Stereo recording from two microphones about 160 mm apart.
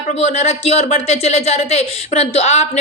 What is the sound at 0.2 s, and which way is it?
Speech, 40° left (ahead or behind).